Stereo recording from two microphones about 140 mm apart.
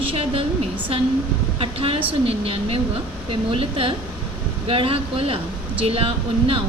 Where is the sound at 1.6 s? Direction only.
40° right (ahead or behind).